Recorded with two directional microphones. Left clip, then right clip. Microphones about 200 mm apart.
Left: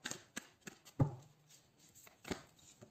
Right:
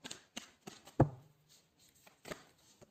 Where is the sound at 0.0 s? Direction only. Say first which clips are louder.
Left 1 dB; 20° left (ahead or behind).